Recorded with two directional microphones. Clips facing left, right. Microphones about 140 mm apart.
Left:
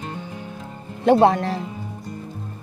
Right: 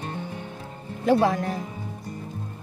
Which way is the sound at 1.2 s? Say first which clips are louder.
Left 6 dB; 75° left (ahead or behind).